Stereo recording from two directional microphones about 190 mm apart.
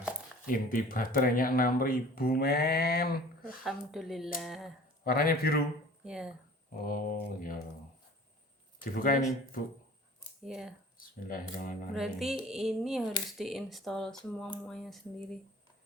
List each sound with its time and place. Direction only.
0.4 s speech: 45° left (ahead or behind)
3.6 s speech: centre (ahead or behind)
5.0 s speech: 50° left (ahead or behind)
6.1 s speech: 5° right (ahead or behind)
6.8 s speech: 50° left (ahead or behind)
8.8 s speech: 50° left (ahead or behind)
10.4 s speech: centre (ahead or behind)
11.3 s speech: 45° left (ahead or behind)
11.9 s speech: centre (ahead or behind)